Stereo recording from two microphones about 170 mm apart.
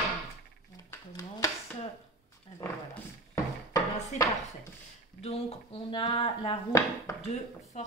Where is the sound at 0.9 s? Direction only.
20° left (ahead or behind).